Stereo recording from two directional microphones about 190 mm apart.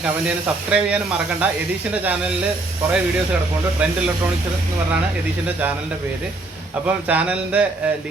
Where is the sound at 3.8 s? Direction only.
5° right (ahead or behind).